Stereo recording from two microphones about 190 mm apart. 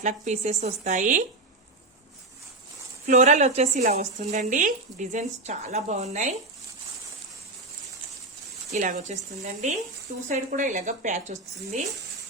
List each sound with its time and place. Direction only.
0.0 s speech: 40° right (ahead or behind)
3.1 s speech: 40° right (ahead or behind)
8.7 s speech: 40° right (ahead or behind)